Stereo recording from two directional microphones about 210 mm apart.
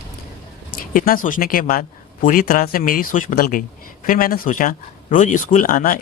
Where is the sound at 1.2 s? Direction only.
40° left (ahead or behind).